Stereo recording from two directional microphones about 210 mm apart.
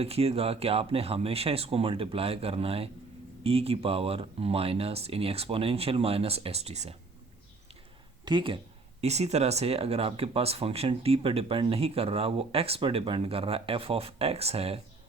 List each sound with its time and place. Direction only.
0.0 s speech: 30° right (ahead or behind)
8.2 s speech: 20° right (ahead or behind)